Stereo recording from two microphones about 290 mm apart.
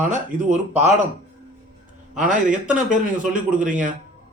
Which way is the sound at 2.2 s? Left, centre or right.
Right.